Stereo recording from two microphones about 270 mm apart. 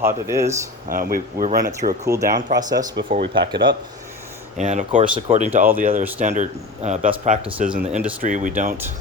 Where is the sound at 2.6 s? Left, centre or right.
Centre.